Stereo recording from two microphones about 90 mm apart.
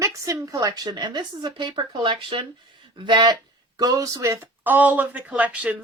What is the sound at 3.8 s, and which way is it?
Speech, 40° right (ahead or behind).